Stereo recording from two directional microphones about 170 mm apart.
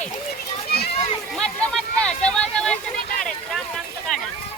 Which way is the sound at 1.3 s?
5° left (ahead or behind).